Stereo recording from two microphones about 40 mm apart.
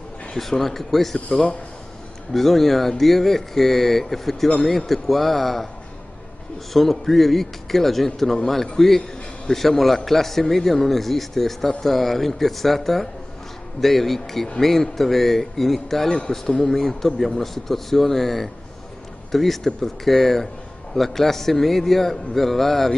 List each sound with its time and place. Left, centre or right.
0.4 s a man's voice: centre
1.3 s a man's voice: left
2.3 s a man's voice: centre
6.7 s a man's voice: centre